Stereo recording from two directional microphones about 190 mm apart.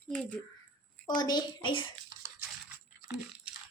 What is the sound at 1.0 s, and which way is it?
Speech, 20° left (ahead or behind).